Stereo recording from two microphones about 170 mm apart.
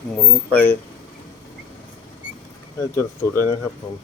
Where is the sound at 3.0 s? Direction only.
15° left (ahead or behind).